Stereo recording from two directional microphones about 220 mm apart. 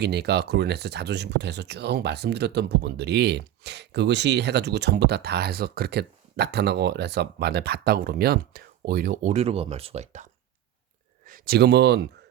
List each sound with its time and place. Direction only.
0.0 s speech: 50° right (ahead or behind); by 10.2 s 30° right (ahead or behind)
11.3 s speech: 40° right (ahead or behind)